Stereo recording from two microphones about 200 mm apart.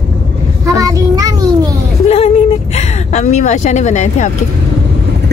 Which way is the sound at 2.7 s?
35° left (ahead or behind).